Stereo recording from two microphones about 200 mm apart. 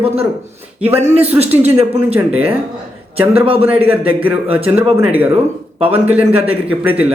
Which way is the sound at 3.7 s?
10° right (ahead or behind).